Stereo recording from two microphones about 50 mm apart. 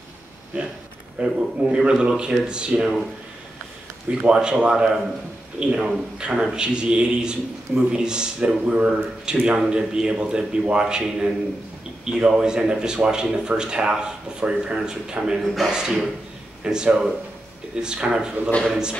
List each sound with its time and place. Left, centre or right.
0.5 s a man's voice: right
4.1 s a man's voice: centre